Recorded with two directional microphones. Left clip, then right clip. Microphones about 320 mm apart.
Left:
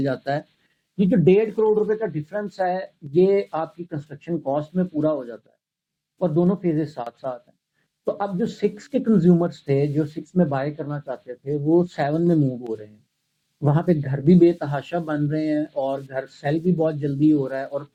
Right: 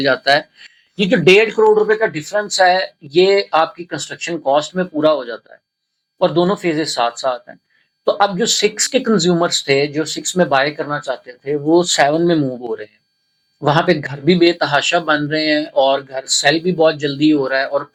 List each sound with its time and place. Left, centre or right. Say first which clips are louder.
0.0 s speech: right 11 dB; centre
6.1 s speech: right 7 dB; centre
6.5 s speech: right 7 dB; centre
8.4 s speech: right 9 dB; centre
11.9 s speech: right 11 dB; centre
12.2 s speech: right 6 dB; centre